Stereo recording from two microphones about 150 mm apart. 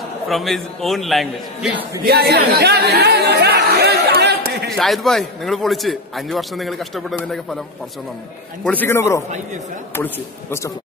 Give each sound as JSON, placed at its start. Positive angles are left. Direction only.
{"t": 0.3, "sound": "a man's voice", "side_deg": 0}
{"t": 2.0, "sound": "chatter", "side_deg": -90}
{"t": 4.6, "sound": "a man's voice", "side_deg": 0}
{"t": 8.6, "sound": "a man's voice", "side_deg": 15}